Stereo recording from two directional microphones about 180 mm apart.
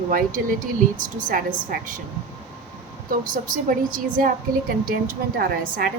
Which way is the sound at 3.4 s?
50° right (ahead or behind).